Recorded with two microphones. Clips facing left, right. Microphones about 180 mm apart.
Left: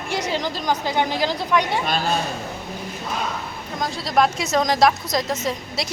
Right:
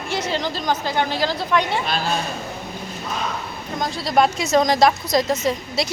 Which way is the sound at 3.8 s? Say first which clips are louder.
Right 1 dB; centre (ahead or behind).